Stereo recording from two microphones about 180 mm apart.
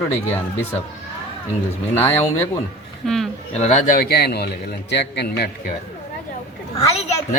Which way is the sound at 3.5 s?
40° left (ahead or behind).